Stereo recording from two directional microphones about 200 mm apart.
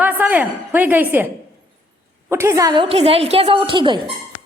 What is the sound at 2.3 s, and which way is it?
Speech, 15° right (ahead or behind).